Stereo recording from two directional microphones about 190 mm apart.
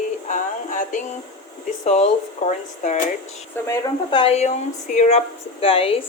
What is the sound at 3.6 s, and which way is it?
Speech, 10° left (ahead or behind).